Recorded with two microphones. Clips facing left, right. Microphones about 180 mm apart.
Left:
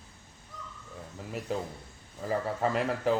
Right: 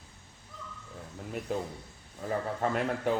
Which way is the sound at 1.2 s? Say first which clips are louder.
Even; centre (ahead or behind).